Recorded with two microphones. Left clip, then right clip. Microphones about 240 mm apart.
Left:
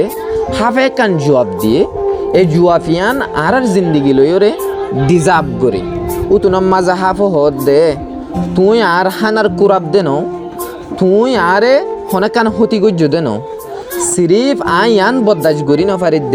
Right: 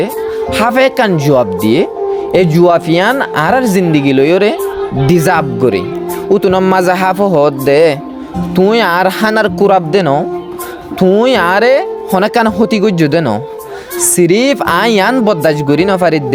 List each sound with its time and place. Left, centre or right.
0.5 s speech: right